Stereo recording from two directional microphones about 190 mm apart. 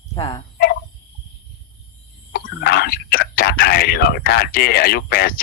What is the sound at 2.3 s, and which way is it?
Speech, 55° left (ahead or behind).